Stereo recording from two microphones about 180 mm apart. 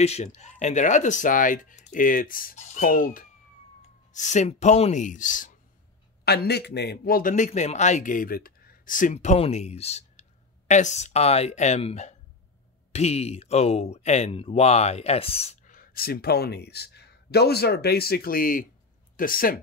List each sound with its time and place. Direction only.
0.0 s a man's voice: 40° left (ahead or behind)
6.2 s a man's voice: 60° left (ahead or behind); by 15.7 s 35° left (ahead or behind)
15.7 s a man's voice: 55° left (ahead or behind)